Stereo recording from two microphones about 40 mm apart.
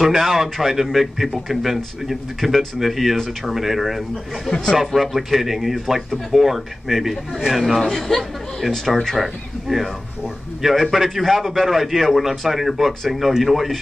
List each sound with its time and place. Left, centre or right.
0.0 s a man's voice: centre
7.9 s a man's voice: centre